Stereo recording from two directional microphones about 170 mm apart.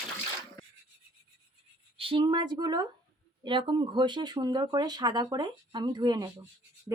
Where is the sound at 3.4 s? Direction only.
30° right (ahead or behind).